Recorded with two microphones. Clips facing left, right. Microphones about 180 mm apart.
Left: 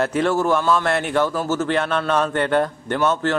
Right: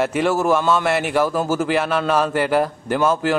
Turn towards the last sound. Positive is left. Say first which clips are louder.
# right 2 dB
turn(degrees=-10)  # may be behind; listen again after turning